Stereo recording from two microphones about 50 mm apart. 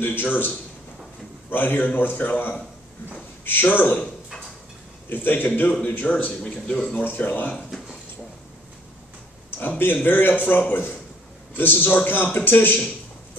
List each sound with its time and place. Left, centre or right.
0.0 s a man's voice: left
3.6 s a man's voice: left
5.1 s a man's voice: left
6.1 s a man's voice: left
7.1 s a man's voice: left
9.6 s a man's voice: left